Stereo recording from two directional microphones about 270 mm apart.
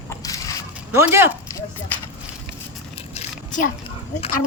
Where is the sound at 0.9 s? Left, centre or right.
Centre.